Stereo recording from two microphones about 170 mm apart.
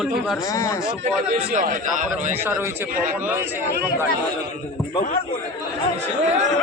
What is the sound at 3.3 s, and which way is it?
Speech, 10° right (ahead or behind).